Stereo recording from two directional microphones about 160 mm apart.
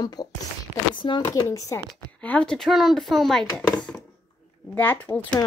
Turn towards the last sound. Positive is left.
turn(degrees=10)  # may be behind; listen again after turning